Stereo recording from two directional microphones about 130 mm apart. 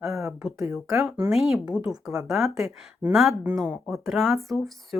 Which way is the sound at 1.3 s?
Centre (ahead or behind).